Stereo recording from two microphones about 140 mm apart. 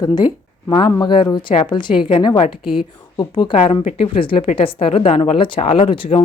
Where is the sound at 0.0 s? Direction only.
30° left (ahead or behind).